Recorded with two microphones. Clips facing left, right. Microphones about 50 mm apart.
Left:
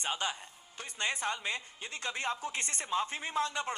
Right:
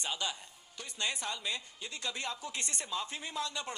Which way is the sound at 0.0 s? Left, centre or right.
Left.